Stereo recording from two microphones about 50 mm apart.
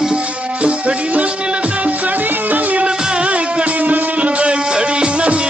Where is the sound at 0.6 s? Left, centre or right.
Right.